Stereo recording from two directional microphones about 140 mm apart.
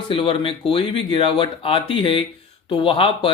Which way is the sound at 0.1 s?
40° left (ahead or behind).